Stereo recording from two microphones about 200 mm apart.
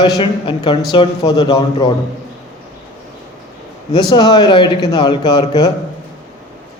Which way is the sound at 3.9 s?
20° left (ahead or behind).